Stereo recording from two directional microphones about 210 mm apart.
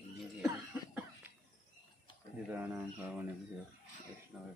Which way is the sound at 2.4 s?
10° right (ahead or behind).